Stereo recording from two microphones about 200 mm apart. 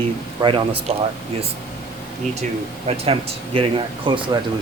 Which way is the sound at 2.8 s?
30° right (ahead or behind).